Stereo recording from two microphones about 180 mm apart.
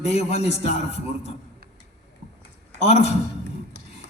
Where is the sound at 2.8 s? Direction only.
35° left (ahead or behind).